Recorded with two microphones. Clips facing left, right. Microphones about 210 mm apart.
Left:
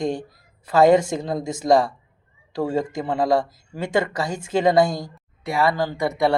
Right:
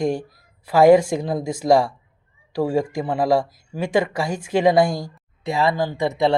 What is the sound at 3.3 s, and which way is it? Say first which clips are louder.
Speech: right 2 dB; 20° left (ahead or behind).